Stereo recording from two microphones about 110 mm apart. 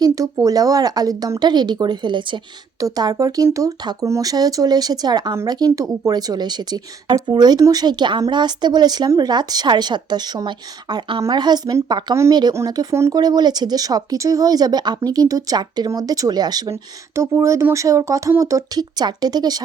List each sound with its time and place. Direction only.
0.0 s speech: 30° right (ahead or behind)
2.8 s speech: 35° right (ahead or behind)